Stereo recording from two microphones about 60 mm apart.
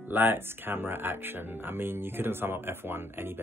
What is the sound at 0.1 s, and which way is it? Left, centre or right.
Speech, right.